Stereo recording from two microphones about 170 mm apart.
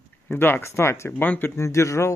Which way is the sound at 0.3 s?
10° left (ahead or behind).